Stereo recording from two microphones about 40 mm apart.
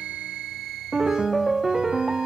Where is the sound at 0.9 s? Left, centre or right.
Centre.